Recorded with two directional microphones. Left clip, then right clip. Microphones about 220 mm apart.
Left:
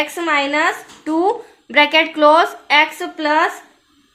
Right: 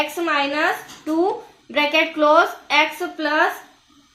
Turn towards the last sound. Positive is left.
turn(degrees=50)  # may be behind; listen again after turning